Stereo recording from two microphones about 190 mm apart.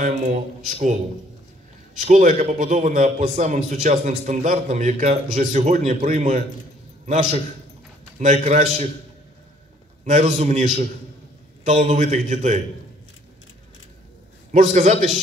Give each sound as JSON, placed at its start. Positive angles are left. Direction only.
{"t": 0.0, "sound": "a man's voice", "side_deg": -40}
{"t": 2.0, "sound": "a man's voice", "side_deg": -40}
{"t": 10.0, "sound": "a man's voice", "side_deg": -40}
{"t": 14.5, "sound": "a man's voice", "side_deg": -40}